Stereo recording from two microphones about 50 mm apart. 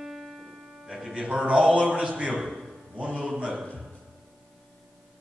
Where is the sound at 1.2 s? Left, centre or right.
Right.